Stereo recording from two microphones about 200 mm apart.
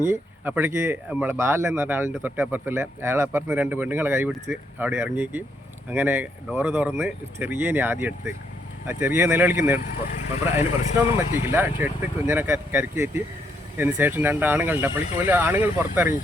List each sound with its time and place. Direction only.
0.0 s speech: 10° right (ahead or behind)
10.6 s speech: 30° left (ahead or behind)
11.2 s speech: 10° right (ahead or behind)